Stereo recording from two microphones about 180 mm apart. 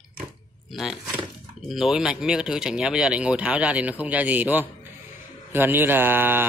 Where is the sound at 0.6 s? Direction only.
Centre (ahead or behind).